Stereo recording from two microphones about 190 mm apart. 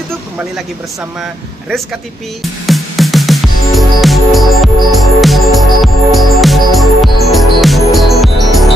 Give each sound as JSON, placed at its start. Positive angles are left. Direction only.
{"t": 2.6, "sound": "music", "side_deg": 0}